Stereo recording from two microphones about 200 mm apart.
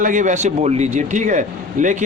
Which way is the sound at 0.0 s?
40° right (ahead or behind).